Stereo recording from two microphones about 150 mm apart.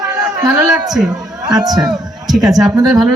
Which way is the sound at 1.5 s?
25° right (ahead or behind).